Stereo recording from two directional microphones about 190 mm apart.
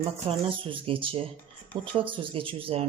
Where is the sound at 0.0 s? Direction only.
30° right (ahead or behind).